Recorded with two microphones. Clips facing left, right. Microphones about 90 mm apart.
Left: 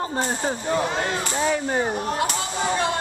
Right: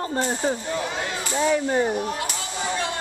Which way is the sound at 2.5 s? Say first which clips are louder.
Left 3 dB; 30° left (ahead or behind).